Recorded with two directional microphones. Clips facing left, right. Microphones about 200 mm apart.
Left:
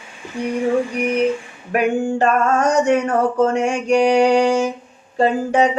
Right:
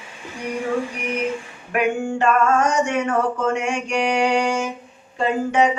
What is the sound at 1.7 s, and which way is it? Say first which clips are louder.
Male singing: left 3 dB; 40° left (ahead or behind).